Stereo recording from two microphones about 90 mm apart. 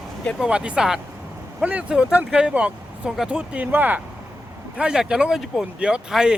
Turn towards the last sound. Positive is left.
turn(degrees=-5)  # may be behind; listen again after turning